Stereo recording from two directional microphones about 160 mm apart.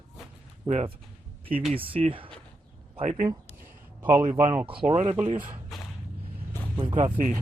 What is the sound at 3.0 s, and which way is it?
Speech, 50° right (ahead or behind).